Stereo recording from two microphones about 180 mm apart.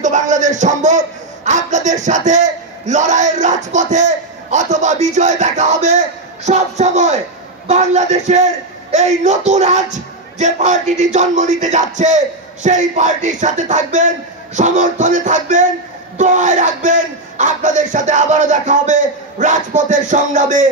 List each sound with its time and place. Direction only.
0.0 s a man's voice: 45° right (ahead or behind)